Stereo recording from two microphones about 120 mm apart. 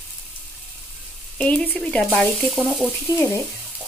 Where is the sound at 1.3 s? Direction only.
10° left (ahead or behind).